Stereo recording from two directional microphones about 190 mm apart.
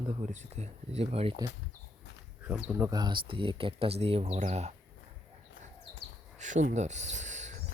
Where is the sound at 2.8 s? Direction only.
20° right (ahead or behind).